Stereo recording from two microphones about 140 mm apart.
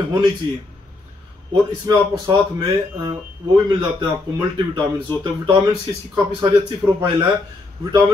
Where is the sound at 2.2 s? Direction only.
30° right (ahead or behind).